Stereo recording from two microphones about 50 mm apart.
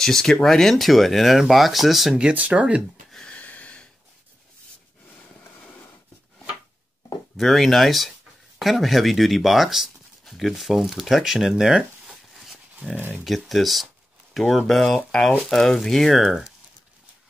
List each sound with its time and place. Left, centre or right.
0.0 s speech: centre
2.1 s speech: right
3.3 s a sound: left
7.3 s speech: centre
12.8 s speech: left
13.2 s speech: centre